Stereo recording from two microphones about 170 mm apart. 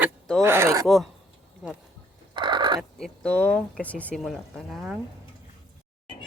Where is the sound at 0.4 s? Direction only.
15° right (ahead or behind).